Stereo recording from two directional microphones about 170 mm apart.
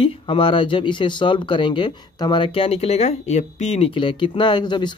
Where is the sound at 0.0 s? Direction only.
30° left (ahead or behind).